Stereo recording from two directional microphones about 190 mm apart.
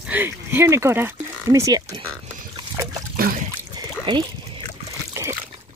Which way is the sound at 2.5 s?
20° right (ahead or behind).